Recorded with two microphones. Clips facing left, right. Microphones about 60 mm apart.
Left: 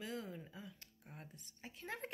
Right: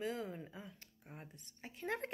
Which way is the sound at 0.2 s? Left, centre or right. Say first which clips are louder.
Right 4 dB; right.